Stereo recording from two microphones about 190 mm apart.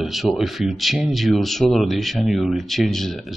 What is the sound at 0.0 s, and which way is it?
Speech, centre (ahead or behind).